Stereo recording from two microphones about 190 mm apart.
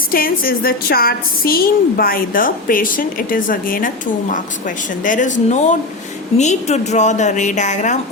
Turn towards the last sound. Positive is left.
turn(degrees=40)  # may be behind; listen again after turning